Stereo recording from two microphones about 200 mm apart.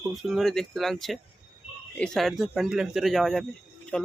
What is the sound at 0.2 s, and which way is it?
Speech, centre (ahead or behind).